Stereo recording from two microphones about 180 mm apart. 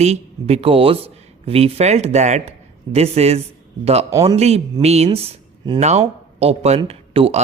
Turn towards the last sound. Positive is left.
turn(degrees=-35)  # may be behind; listen again after turning